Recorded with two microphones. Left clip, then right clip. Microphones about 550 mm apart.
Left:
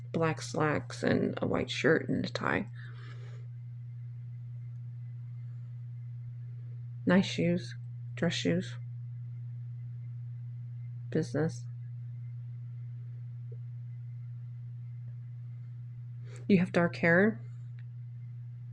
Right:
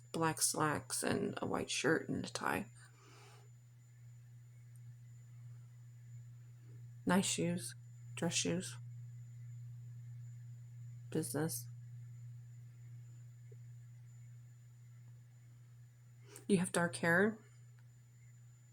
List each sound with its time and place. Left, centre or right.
0.1 s speech: right
7.0 s speech: right
11.1 s speech: right
16.3 s speech: right